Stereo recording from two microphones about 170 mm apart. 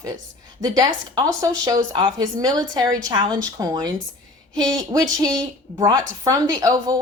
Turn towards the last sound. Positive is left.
turn(degrees=-20)  # may be behind; listen again after turning